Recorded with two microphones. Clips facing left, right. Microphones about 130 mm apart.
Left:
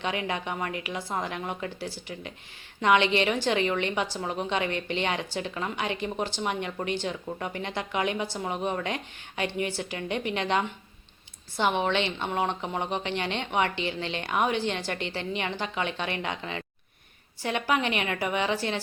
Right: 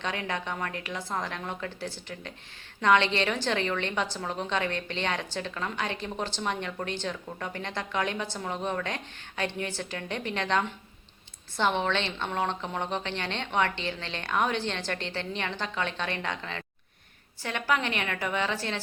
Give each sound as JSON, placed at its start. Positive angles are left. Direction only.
{"t": 0.0, "sound": "a woman's voice", "side_deg": 10}